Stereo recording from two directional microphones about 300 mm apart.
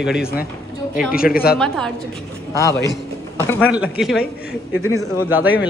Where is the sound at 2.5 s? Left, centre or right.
Centre.